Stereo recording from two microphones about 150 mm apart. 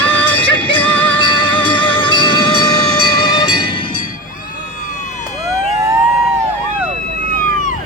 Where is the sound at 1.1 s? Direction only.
35° left (ahead or behind).